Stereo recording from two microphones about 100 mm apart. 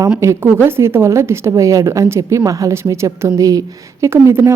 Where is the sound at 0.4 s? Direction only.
20° right (ahead or behind).